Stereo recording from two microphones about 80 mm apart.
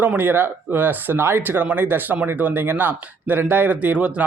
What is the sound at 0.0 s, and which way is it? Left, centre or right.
Speech, right.